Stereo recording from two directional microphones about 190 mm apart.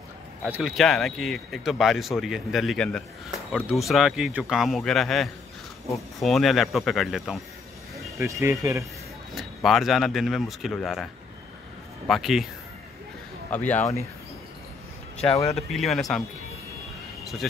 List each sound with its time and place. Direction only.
0.4 s speech: 5° right (ahead or behind)
8.2 s speech: 15° right (ahead or behind)
9.3 s speech: centre (ahead or behind)
12.1 s speech: centre (ahead or behind)
13.7 s speech: 10° left (ahead or behind)
15.5 s speech: centre (ahead or behind)